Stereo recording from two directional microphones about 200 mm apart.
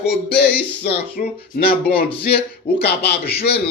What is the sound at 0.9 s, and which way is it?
Speech, 50° left (ahead or behind).